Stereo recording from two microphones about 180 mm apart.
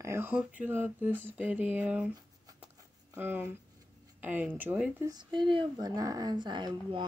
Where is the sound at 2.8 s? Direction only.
15° right (ahead or behind).